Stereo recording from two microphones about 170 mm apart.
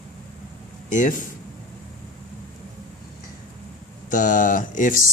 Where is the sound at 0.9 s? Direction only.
50° left (ahead or behind).